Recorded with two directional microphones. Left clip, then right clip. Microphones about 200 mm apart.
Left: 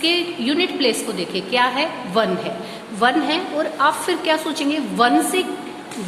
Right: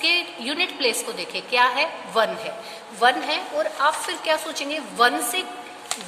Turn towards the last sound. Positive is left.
turn(degrees=-20)  # may be behind; listen again after turning